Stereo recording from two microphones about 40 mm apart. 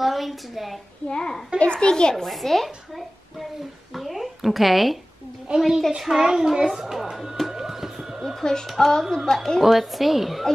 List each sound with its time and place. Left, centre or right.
0.0 s a woman's voice: centre
1.0 s a child's voice: centre
2.2 s a woman's voice: centre
3.9 s a sound: centre
5.5 s a woman's voice: right
6.0 s a child's voice: centre
6.7 s a sound: centre
7.5 s music: centre
8.2 s a sound: centre
8.6 s a woman's voice: centre
9.6 s a woman's voice: centre